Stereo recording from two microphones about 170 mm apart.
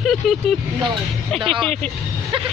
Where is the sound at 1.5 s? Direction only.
Centre (ahead or behind).